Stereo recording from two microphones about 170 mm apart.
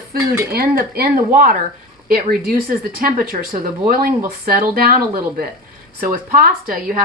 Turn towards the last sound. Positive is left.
turn(degrees=-55)  # may be behind; listen again after turning